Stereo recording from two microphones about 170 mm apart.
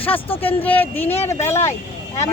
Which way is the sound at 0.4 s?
10° left (ahead or behind).